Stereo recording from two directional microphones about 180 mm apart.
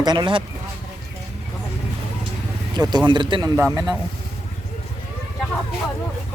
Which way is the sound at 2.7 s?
20° right (ahead or behind).